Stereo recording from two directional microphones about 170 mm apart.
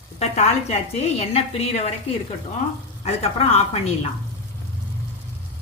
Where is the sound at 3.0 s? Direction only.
40° left (ahead or behind).